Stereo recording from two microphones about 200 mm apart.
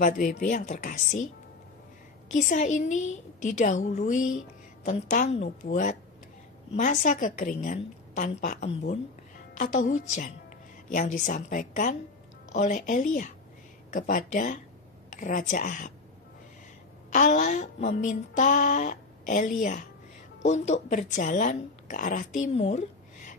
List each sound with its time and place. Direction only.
0.4 s speech: 40° left (ahead or behind)
2.2 s speech: 35° left (ahead or behind)
17.1 s speech: 35° left (ahead or behind)
22.4 s a sound: 35° left (ahead or behind)